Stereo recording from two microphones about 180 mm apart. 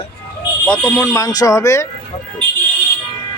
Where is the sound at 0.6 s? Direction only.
5° left (ahead or behind).